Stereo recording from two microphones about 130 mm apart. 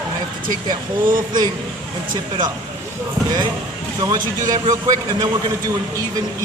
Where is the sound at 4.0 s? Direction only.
30° right (ahead or behind).